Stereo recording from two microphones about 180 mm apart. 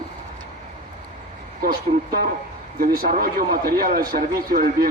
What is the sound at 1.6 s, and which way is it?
A man's voice, 55° right (ahead or behind).